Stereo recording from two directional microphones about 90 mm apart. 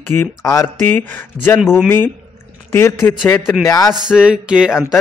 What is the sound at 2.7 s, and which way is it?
Speech, 30° left (ahead or behind).